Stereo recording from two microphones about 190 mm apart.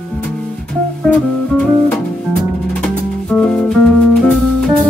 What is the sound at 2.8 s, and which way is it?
Music, 5° left (ahead or behind).